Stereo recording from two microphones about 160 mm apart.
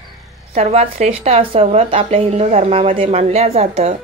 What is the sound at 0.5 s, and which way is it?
Speech, 40° right (ahead or behind).